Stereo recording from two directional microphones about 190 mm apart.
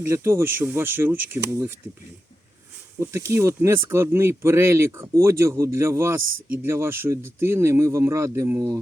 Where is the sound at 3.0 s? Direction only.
15° right (ahead or behind).